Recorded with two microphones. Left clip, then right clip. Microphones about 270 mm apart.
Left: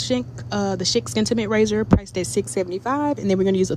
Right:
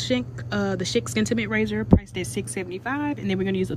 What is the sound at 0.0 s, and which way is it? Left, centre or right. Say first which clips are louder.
A woman's voice: left 2 dB; centre.